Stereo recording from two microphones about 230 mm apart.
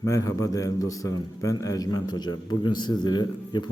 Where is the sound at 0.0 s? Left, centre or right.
Centre.